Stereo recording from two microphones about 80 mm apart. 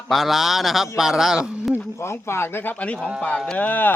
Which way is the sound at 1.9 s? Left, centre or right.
Left.